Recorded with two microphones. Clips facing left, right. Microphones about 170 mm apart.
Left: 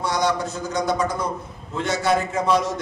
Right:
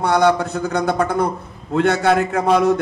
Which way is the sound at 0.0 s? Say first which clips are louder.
Right 7 dB; 60° right (ahead or behind).